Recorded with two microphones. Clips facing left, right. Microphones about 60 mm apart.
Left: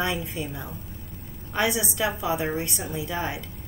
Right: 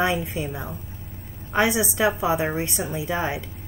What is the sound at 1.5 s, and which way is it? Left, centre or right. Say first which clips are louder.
A woman's voice: right 4 dB; right.